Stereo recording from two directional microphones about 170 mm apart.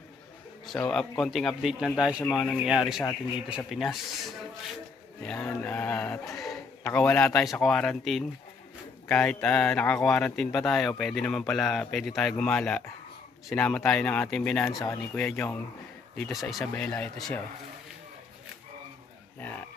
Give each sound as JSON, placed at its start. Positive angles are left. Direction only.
{"t": 0.9, "sound": "speech", "side_deg": 5}
{"t": 6.3, "sound": "speech", "side_deg": 0}
{"t": 16.7, "sound": "speech", "side_deg": 10}